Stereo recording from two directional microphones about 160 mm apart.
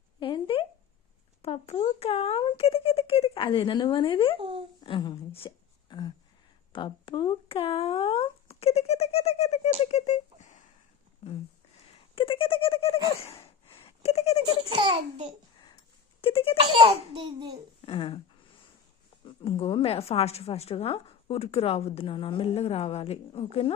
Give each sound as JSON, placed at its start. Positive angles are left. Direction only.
{"t": 0.2, "sound": "a sound", "side_deg": 30}
{"t": 1.4, "sound": "a woman's voice", "side_deg": 40}
{"t": 4.4, "sound": "speech", "side_deg": -35}
{"t": 4.8, "sound": "a sound", "side_deg": 30}
{"t": 6.7, "sound": "speech", "side_deg": 30}
{"t": 13.2, "sound": "a sound", "side_deg": 35}
{"t": 14.7, "sound": "a child's voice", "side_deg": -35}
{"t": 16.2, "sound": "a woman's voice", "side_deg": 35}
{"t": 16.7, "sound": "a child's voice", "side_deg": -40}
{"t": 17.8, "sound": "a woman's voice", "side_deg": 30}
{"t": 19.2, "sound": "a woman's voice", "side_deg": 35}